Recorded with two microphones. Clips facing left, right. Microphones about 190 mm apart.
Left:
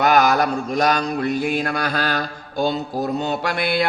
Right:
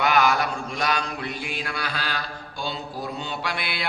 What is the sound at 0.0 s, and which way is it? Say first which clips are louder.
Mantra: left 5 dB; 40° left (ahead or behind).